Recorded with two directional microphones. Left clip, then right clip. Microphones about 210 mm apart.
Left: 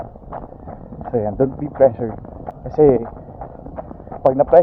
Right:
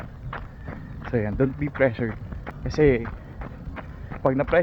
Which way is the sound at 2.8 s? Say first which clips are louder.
Left 7 dB; 10° right (ahead or behind).